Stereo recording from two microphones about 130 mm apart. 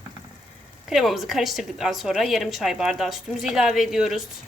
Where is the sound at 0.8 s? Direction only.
Centre (ahead or behind).